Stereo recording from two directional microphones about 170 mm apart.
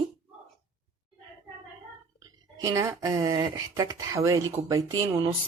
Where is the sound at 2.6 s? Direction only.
20° right (ahead or behind).